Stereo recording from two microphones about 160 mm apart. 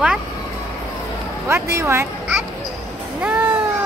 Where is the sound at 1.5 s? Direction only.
15° right (ahead or behind).